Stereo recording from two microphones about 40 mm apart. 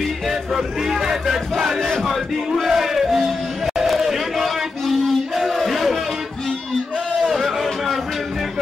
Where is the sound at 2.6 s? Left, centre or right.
Centre.